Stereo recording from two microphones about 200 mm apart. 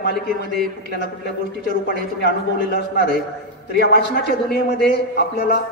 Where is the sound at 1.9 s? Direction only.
50° left (ahead or behind).